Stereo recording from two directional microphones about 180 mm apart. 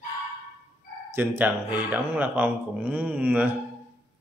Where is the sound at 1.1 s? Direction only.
10° right (ahead or behind).